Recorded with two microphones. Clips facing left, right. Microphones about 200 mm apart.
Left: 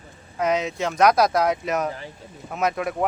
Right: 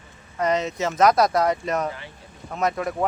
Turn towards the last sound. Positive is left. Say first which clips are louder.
# even
turn(degrees=5)  # may be behind; listen again after turning